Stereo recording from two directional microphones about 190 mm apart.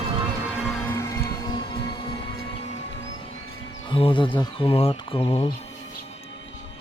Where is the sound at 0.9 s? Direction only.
15° left (ahead or behind); by 2.9 s 35° left (ahead or behind).